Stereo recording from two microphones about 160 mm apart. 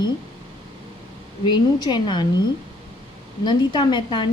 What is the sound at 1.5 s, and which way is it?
Speech, 30° left (ahead or behind).